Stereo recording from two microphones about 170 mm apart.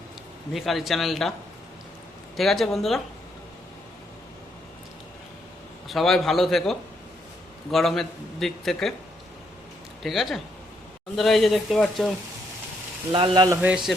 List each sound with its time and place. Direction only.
0.5 s a man's voice: centre (ahead or behind)
2.3 s a man's voice: centre (ahead or behind)
5.9 s a man's voice: centre (ahead or behind)
10.0 s a man's voice: centre (ahead or behind)
13.1 s speech: 30° right (ahead or behind)
13.6 s a man's voice: 5° right (ahead or behind)